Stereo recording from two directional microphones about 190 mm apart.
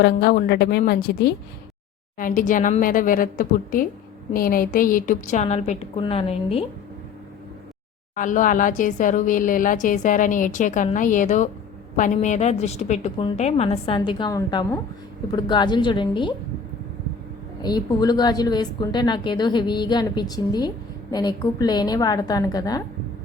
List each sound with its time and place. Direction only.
0.0 s a woman's voice: 55° left (ahead or behind)
2.1 s a woman's voice: 45° left (ahead or behind)
8.1 s a woman's voice: 45° left (ahead or behind); by 16.3 s 25° left (ahead or behind)
17.6 s a woman's voice: 20° left (ahead or behind)